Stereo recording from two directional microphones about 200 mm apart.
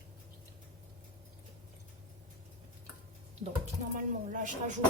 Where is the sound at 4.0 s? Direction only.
40° right (ahead or behind).